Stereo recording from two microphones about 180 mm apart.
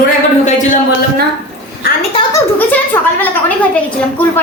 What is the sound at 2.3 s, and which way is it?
Speech, 10° left (ahead or behind).